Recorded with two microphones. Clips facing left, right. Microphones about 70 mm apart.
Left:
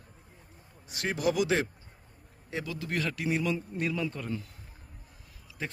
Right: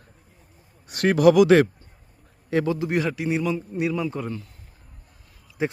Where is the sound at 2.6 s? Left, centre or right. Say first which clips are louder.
Right 9 dB; right.